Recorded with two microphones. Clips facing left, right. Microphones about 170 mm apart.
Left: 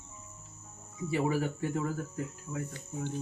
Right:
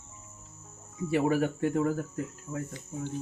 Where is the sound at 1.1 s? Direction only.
60° right (ahead or behind).